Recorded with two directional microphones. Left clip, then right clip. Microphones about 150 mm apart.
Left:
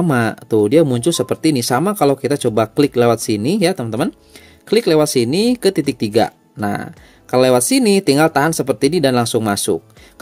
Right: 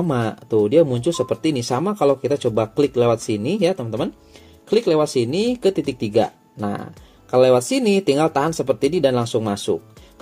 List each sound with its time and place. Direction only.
0.0 s speech: 40° left (ahead or behind)